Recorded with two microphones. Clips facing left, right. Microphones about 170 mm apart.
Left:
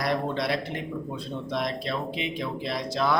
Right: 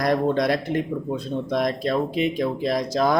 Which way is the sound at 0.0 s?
45° right (ahead or behind).